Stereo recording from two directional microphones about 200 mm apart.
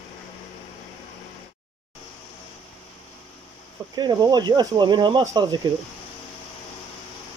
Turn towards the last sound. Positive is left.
turn(degrees=-20)  # may be behind; listen again after turning